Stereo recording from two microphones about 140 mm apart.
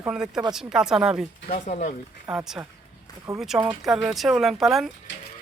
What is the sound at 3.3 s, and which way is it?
Speech, 25° right (ahead or behind).